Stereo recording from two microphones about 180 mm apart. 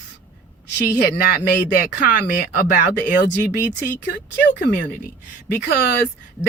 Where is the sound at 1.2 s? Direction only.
55° left (ahead or behind).